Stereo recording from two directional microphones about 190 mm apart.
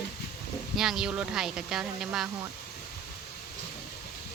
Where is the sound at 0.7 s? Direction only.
Centre (ahead or behind).